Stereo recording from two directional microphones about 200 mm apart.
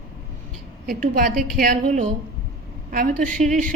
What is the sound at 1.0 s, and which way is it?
A woman's voice, 40° right (ahead or behind).